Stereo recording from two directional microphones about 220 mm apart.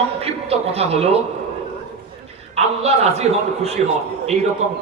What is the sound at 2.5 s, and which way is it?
Speech, 30° right (ahead or behind).